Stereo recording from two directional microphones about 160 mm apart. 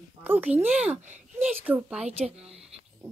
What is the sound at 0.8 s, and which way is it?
Speech, 45° right (ahead or behind).